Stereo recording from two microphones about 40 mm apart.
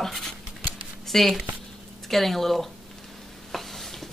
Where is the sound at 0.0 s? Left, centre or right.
Centre.